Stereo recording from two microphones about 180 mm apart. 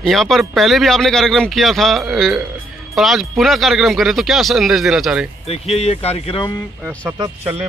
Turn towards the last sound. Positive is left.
turn(degrees=-15)  # may be behind; listen again after turning